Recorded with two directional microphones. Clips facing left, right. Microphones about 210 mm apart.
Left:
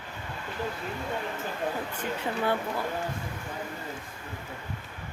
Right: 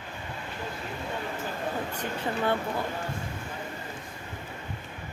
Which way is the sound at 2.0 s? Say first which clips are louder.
Even; 10° left (ahead or behind).